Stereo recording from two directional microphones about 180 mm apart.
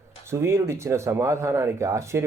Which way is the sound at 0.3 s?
15° right (ahead or behind).